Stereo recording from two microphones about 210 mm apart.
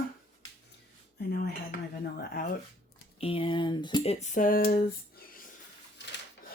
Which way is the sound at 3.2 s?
25° left (ahead or behind).